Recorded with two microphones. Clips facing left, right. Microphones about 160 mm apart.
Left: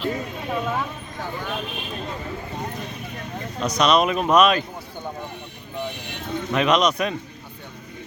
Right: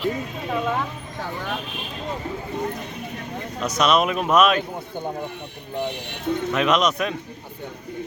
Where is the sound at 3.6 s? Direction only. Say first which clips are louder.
Left 1 dB; 5° right (ahead or behind).